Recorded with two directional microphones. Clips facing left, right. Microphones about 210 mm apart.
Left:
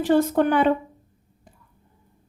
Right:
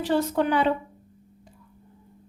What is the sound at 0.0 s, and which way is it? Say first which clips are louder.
Speech: left 5 dB; 50° left (ahead or behind).